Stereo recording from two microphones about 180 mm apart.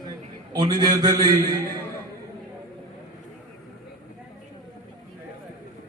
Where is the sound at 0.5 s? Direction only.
25° right (ahead or behind).